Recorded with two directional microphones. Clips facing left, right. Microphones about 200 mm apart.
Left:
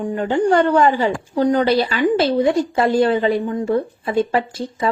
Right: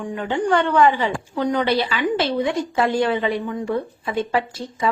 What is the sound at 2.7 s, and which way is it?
A woman's voice, 35° left (ahead or behind).